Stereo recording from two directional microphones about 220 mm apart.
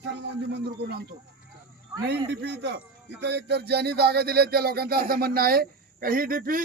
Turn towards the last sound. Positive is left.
turn(degrees=-40)  # may be behind; listen again after turning